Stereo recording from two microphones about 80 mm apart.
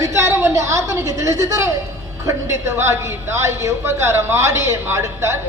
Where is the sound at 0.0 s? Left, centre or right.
Right.